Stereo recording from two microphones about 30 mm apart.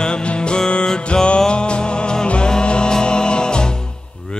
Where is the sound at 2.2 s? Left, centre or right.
Left.